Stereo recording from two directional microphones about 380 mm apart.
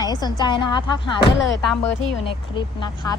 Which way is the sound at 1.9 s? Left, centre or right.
Left.